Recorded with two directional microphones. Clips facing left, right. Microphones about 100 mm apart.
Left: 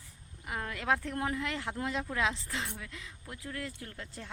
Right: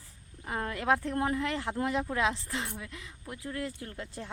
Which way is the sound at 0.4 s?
30° right (ahead or behind).